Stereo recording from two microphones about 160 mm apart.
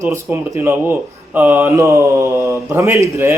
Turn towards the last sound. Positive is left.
turn(degrees=-15)  # may be behind; listen again after turning